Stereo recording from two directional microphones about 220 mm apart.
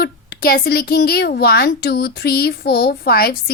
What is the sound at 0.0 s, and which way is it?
A woman's voice, 45° left (ahead or behind).